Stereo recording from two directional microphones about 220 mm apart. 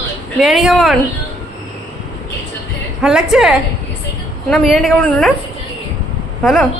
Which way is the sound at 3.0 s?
Centre (ahead or behind).